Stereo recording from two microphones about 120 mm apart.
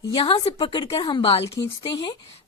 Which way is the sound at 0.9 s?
40° left (ahead or behind).